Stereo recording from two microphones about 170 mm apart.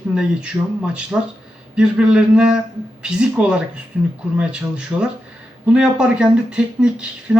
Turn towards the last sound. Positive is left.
turn(degrees=-5)  # may be behind; listen again after turning